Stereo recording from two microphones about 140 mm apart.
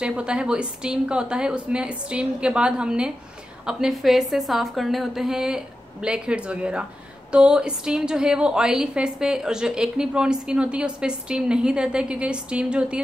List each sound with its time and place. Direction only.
0.0 s a woman's voice: 5° right (ahead or behind)